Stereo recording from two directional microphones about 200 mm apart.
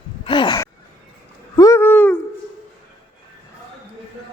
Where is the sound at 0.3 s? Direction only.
25° left (ahead or behind).